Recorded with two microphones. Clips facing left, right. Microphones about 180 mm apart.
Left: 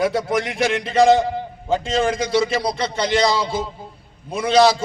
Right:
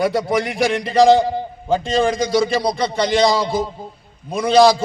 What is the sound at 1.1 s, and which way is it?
A man's voice, 30° right (ahead or behind).